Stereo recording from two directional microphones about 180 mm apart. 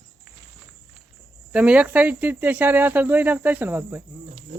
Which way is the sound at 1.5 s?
5° right (ahead or behind).